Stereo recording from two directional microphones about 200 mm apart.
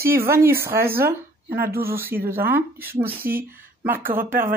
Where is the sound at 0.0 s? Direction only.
10° right (ahead or behind).